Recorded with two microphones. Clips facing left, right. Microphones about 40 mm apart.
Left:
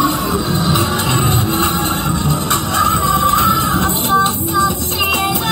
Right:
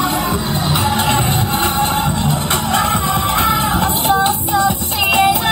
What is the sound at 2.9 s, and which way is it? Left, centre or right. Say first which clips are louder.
Music: left 3 dB; centre.